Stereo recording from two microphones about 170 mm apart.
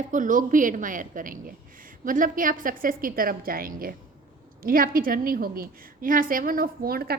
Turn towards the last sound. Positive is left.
turn(degrees=-60)  # may be behind; listen again after turning